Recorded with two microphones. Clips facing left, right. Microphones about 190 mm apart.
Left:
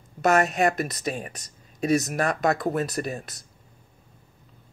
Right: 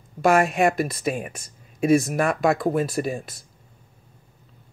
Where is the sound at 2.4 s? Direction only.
5° right (ahead or behind).